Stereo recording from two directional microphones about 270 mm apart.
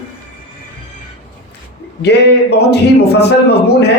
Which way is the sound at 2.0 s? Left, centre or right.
Left.